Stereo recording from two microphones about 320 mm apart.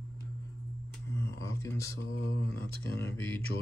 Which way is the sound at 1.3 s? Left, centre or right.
Centre.